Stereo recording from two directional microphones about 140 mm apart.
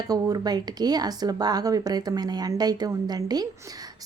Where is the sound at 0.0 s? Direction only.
25° right (ahead or behind).